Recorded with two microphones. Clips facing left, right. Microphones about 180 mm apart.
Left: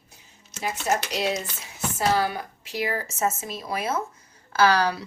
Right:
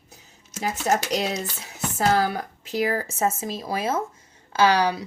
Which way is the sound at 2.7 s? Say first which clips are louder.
Right 4 dB; 40° right (ahead or behind).